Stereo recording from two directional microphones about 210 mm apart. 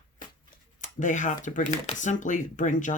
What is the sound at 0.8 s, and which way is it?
Speech, 40° left (ahead or behind).